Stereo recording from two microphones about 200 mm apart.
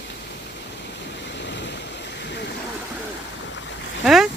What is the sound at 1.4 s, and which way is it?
Waves, 60° left (ahead or behind).